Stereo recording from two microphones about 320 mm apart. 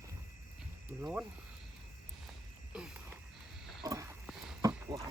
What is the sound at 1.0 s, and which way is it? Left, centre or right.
Speech, centre.